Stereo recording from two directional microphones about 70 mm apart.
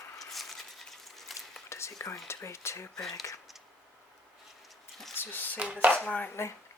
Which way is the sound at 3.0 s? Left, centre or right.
Centre.